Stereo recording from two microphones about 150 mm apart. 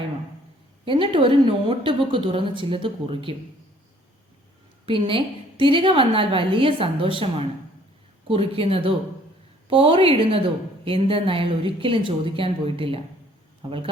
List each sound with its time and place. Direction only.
0.9 s a woman's voice: 35° right (ahead or behind)
4.9 s a woman's voice: 35° right (ahead or behind)